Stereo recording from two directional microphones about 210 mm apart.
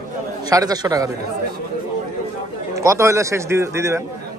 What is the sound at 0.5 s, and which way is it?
Speech, 20° right (ahead or behind).